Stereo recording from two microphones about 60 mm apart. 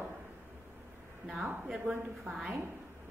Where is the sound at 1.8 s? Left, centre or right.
Right.